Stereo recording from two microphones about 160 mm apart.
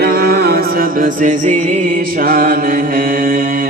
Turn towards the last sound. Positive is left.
turn(degrees=-60)  # may be behind; listen again after turning